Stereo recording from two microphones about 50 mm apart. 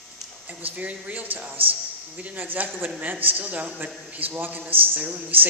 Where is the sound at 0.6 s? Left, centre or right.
Right.